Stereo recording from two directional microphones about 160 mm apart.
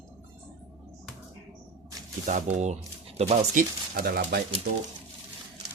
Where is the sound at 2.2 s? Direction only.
45° right (ahead or behind); by 4.4 s 70° right (ahead or behind).